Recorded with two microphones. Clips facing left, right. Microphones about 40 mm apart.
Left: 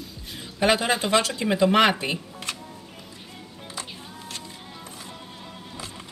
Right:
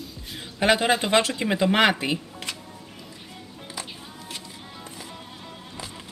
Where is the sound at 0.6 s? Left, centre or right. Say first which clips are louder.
Right 1 dB; right.